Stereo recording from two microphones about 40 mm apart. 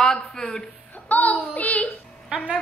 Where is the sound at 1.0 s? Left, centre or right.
Left.